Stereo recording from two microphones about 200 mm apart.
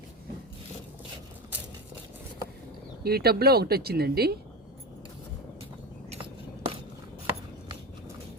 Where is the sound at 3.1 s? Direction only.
50° right (ahead or behind).